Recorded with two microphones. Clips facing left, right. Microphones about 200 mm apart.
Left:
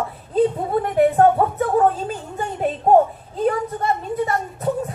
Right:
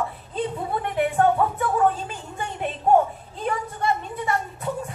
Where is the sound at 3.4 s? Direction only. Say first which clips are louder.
Left 4 dB; 40° left (ahead or behind).